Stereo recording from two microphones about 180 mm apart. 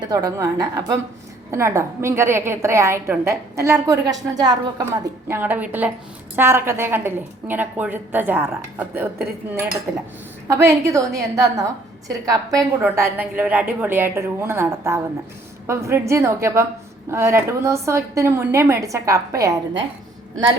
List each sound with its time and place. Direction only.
0.0 s a woman's voice: 20° right (ahead or behind)
10.5 s a woman's voice: 15° right (ahead or behind)